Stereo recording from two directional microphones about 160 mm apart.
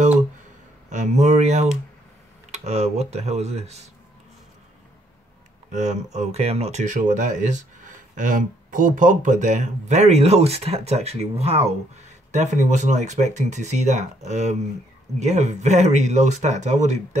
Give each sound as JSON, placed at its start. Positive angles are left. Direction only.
{"t": 0.8, "sound": "speech", "side_deg": -50}
{"t": 5.7, "sound": "speech", "side_deg": -45}